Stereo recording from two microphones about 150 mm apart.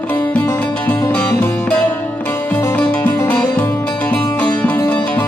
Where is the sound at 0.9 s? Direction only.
10° left (ahead or behind).